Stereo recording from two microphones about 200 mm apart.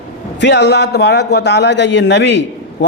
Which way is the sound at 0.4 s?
55° left (ahead or behind).